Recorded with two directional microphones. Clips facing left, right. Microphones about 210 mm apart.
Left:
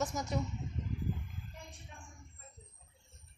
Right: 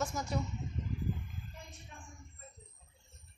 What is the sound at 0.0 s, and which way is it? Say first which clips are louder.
Speech: even; 20° left (ahead or behind).